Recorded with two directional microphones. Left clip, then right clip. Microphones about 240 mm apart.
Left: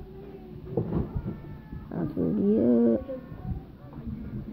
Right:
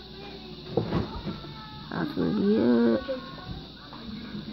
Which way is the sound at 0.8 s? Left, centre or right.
Right.